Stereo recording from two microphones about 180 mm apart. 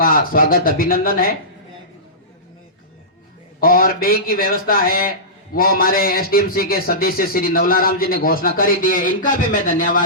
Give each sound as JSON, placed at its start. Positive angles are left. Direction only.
{"t": 0.0, "sound": "a man's voice", "side_deg": 55}
{"t": 3.6, "sound": "a man's voice", "side_deg": 55}